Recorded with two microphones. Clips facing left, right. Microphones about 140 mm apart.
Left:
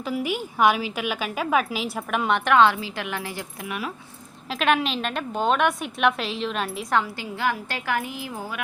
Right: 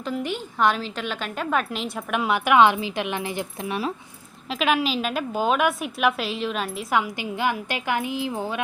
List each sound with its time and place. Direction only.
0.0 s a woman's voice: 5° left (ahead or behind); by 3.9 s 30° right (ahead or behind)
4.4 s a woman's voice: centre (ahead or behind)
6.9 s a woman's voice: 15° right (ahead or behind)